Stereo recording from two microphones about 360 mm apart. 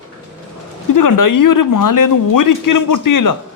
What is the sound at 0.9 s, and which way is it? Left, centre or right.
Speech, left.